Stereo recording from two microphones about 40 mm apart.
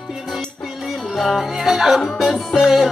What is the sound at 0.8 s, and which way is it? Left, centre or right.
Music, centre.